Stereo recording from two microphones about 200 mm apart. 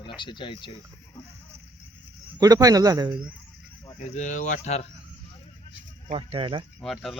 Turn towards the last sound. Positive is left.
turn(degrees=0)  # may be behind; listen again after turning